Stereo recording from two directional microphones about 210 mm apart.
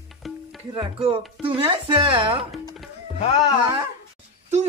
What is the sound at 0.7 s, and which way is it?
Speech, 25° right (ahead or behind).